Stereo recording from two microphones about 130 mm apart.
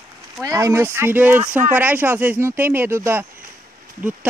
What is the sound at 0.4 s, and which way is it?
Speech, 25° right (ahead or behind).